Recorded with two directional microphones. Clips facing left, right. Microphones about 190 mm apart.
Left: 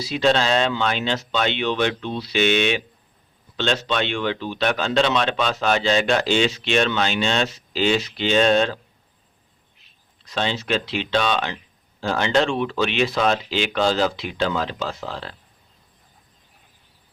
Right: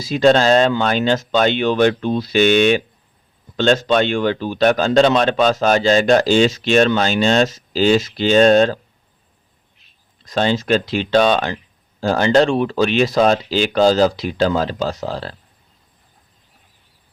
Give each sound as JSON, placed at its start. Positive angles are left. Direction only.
{"t": 0.0, "sound": "speech", "side_deg": -45}
{"t": 10.2, "sound": "speech", "side_deg": -45}